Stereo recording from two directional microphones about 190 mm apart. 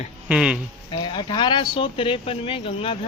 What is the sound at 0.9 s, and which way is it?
Speech, 25° left (ahead or behind).